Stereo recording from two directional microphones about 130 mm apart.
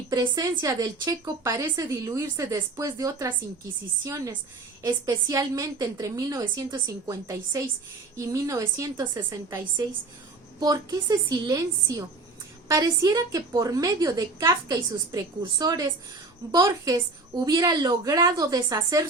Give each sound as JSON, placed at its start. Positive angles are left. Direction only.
{"t": 0.1, "sound": "speech", "side_deg": -25}